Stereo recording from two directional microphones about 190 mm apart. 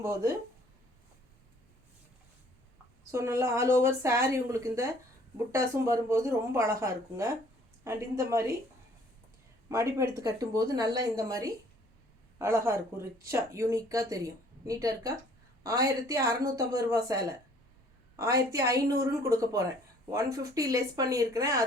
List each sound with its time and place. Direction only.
0.0 s speech: 15° right (ahead or behind)
3.1 s speech: 15° right (ahead or behind)
9.6 s speech: 15° right (ahead or behind)
18.2 s speech: 15° right (ahead or behind)